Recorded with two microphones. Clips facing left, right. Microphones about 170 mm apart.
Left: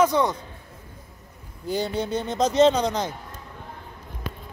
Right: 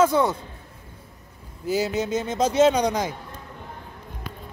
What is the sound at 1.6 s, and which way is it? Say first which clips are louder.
Speech: right 2 dB; 5° right (ahead or behind).